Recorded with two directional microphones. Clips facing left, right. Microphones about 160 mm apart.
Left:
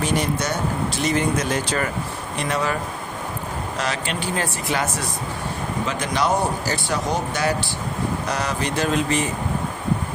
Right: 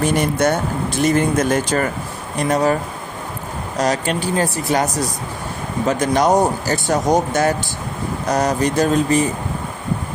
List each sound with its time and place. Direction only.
0.0 s speech: 55° right (ahead or behind)
3.8 s speech: 40° right (ahead or behind)